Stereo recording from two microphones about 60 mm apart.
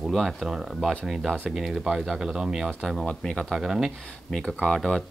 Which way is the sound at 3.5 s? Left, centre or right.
Centre.